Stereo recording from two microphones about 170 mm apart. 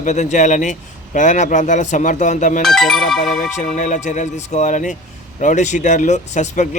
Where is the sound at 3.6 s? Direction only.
45° left (ahead or behind).